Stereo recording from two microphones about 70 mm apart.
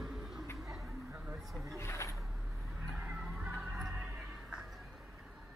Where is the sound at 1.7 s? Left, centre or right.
Left.